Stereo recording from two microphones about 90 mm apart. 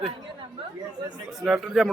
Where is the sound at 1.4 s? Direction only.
5° right (ahead or behind).